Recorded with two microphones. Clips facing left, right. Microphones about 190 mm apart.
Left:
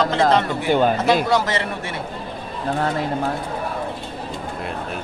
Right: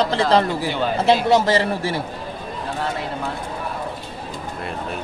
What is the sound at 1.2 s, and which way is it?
Speech, 30° right (ahead or behind).